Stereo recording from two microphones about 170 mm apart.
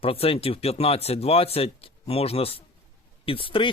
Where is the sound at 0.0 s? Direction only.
35° left (ahead or behind).